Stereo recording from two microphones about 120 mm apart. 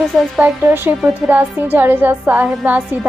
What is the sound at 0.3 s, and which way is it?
Speech, 15° right (ahead or behind).